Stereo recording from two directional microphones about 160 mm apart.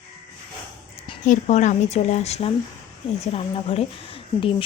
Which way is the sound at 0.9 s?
35° left (ahead or behind).